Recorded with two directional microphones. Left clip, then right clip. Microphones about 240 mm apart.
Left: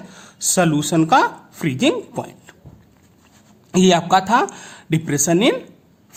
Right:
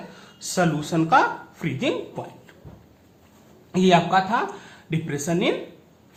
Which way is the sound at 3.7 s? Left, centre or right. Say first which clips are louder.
Left 4 dB; left.